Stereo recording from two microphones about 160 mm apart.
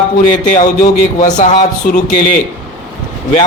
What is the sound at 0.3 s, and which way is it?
A man's voice, 50° left (ahead or behind).